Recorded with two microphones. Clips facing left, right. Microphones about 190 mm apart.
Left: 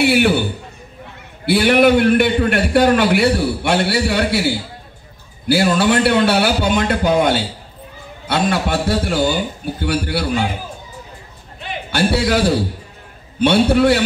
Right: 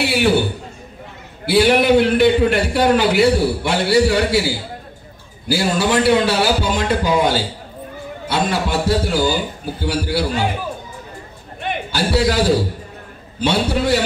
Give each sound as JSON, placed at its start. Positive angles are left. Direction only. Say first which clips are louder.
{"t": 0.0, "sound": "a man's voice", "louder": "left 4 dB", "side_deg": 60}
{"t": 1.4, "sound": "a man's voice", "louder": "left 2 dB", "side_deg": 60}
{"t": 5.5, "sound": "a man's voice", "louder": "left 3 dB", "side_deg": 60}
{"t": 11.9, "sound": "a man's voice", "louder": "left 2 dB", "side_deg": 60}